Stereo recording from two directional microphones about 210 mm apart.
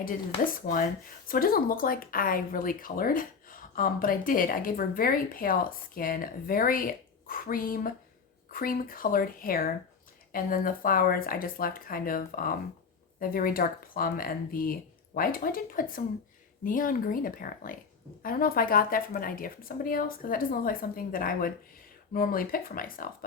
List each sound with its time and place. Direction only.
1.3 s speech: 45° left (ahead or behind)